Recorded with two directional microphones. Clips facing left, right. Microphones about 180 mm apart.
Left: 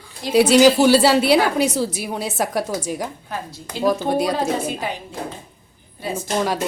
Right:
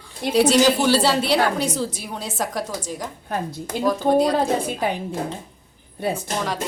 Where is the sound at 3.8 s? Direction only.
10° left (ahead or behind).